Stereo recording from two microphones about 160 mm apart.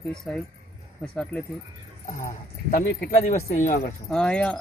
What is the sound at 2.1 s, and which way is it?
Speech, 50° left (ahead or behind).